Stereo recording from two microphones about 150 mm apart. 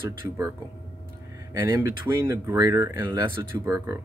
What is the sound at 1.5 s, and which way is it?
Speech, 20° right (ahead or behind).